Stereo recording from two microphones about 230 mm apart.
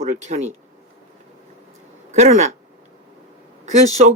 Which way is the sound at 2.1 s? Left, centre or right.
Right.